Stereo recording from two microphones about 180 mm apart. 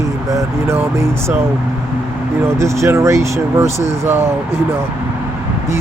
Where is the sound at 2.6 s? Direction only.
15° right (ahead or behind).